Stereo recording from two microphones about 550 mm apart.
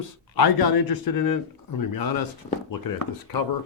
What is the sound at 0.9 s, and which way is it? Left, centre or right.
Speech, left.